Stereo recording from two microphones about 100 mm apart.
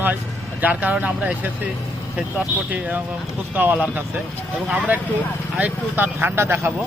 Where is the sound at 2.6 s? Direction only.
15° right (ahead or behind).